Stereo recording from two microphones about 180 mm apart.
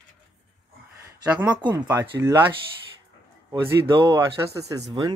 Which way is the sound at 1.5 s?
25° right (ahead or behind).